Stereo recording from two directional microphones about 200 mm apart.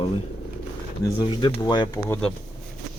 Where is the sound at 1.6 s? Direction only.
20° left (ahead or behind).